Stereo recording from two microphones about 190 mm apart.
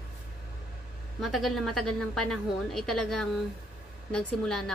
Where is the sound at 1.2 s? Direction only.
Centre (ahead or behind).